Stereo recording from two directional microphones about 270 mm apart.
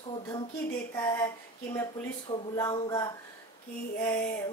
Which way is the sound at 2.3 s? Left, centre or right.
Centre.